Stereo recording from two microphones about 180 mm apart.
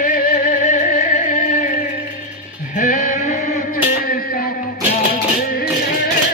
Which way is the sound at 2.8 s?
45° left (ahead or behind).